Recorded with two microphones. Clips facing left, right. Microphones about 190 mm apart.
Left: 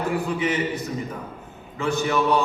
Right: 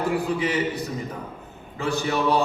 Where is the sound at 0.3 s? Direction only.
35° right (ahead or behind).